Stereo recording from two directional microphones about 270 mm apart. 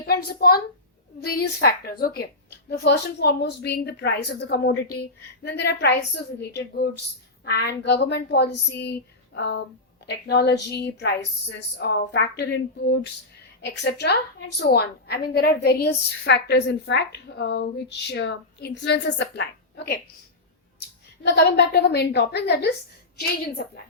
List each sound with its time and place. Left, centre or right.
0.3 s a woman's voice: left
8.7 s a sound: left
10.1 s a woman's voice: left
21.2 s a woman's voice: left